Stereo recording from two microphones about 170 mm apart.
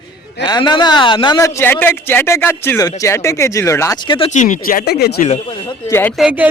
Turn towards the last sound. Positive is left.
turn(degrees=-5)  # may be behind; listen again after turning